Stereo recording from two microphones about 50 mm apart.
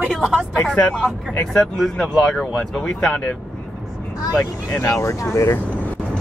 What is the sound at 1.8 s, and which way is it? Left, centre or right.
Speech, centre.